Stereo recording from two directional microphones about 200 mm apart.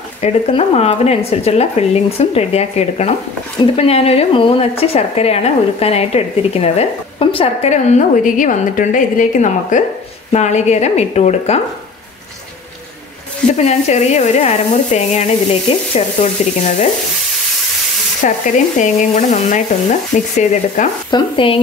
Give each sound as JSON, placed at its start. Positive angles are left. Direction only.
{"t": 0.2, "sound": "speech", "side_deg": 30}
{"t": 13.5, "sound": "speech", "side_deg": 35}
{"t": 18.2, "sound": "speech", "side_deg": 40}
{"t": 21.1, "sound": "speech", "side_deg": 25}